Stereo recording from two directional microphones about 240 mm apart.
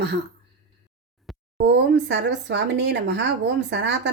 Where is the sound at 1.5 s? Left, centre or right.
Right.